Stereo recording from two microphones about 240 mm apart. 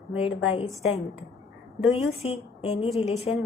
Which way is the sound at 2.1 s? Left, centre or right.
Left.